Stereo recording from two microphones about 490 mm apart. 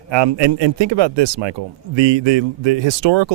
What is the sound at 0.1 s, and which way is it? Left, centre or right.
A man's voice, right.